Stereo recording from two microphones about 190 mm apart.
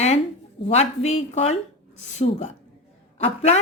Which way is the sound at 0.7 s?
35° left (ahead or behind).